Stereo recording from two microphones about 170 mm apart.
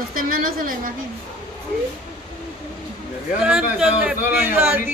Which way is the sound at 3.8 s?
5° right (ahead or behind).